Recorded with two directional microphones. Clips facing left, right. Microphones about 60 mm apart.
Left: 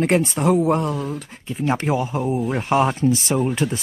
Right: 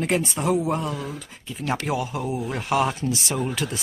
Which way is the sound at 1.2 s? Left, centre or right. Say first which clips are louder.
Left 5 dB; left.